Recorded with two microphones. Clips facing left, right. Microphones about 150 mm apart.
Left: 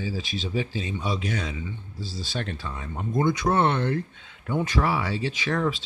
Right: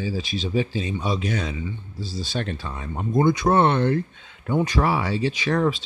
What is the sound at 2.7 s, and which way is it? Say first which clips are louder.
Speech: right 5 dB; 35° right (ahead or behind).